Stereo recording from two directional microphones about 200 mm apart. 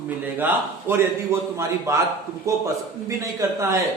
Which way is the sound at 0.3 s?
10° right (ahead or behind).